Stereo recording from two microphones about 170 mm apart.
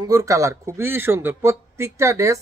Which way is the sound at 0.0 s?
20° right (ahead or behind).